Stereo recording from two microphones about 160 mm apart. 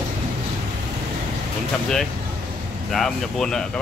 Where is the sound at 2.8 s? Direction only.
5° left (ahead or behind).